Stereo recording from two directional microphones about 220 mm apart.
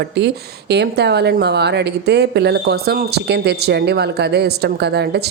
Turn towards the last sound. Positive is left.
turn(degrees=-50)  # may be behind; listen again after turning